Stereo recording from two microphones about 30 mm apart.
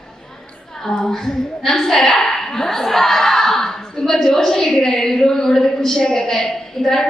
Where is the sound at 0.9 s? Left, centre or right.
Centre.